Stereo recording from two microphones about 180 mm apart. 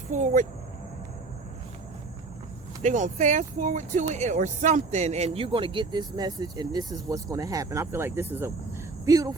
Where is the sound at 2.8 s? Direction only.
45° right (ahead or behind).